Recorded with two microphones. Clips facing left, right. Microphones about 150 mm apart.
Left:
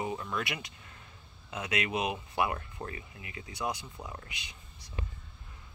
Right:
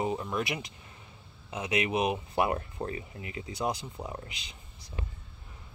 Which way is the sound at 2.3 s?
35° right (ahead or behind).